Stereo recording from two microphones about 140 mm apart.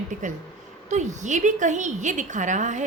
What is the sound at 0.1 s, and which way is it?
A woman's voice, 65° right (ahead or behind).